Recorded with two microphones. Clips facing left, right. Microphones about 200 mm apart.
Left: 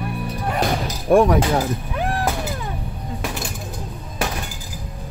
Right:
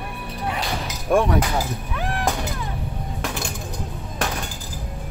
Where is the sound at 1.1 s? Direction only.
35° left (ahead or behind).